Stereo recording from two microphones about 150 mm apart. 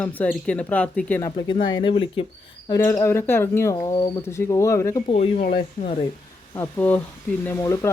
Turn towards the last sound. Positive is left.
turn(degrees=20)  # may be behind; listen again after turning